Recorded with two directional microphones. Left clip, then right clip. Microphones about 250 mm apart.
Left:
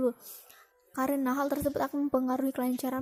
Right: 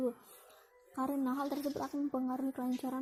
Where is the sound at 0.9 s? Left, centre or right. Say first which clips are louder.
Left 7 dB; left.